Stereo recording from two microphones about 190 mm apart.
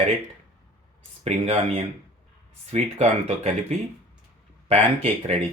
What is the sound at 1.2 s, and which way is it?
Speech, 30° right (ahead or behind).